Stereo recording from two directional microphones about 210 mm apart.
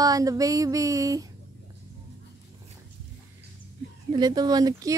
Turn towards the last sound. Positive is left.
turn(degrees=-15)  # may be behind; listen again after turning